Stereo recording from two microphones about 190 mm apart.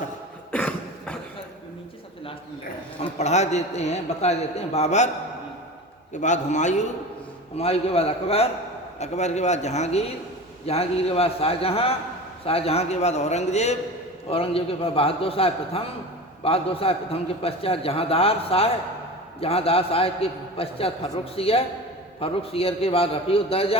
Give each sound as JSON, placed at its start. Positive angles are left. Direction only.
{"t": 0.5, "sound": "cough", "side_deg": 5}
{"t": 3.0, "sound": "a man's voice", "side_deg": 35}
{"t": 6.1, "sound": "a man's voice", "side_deg": 40}